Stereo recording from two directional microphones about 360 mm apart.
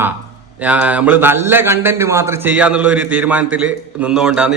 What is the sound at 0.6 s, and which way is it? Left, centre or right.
A man's voice, centre.